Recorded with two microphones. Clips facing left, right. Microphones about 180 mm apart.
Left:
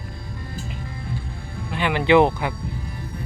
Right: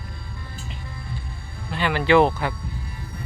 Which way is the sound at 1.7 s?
15° left (ahead or behind).